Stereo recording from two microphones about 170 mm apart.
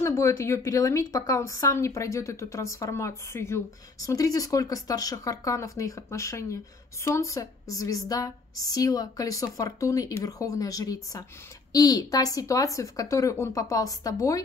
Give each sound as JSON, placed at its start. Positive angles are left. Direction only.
{"t": 0.0, "sound": "a woman's voice", "side_deg": 15}